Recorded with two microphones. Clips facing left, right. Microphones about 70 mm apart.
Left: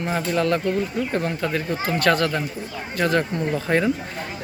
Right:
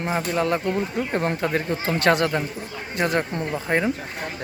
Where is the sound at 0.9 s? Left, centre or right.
Right.